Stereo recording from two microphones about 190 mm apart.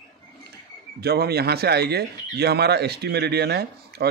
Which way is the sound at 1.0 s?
55° right (ahead or behind).